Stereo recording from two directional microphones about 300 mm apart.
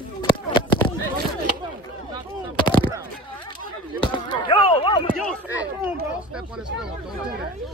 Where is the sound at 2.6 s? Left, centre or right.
Centre.